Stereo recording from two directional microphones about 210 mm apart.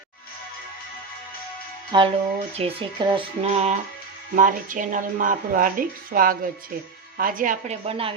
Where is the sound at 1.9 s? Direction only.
25° right (ahead or behind).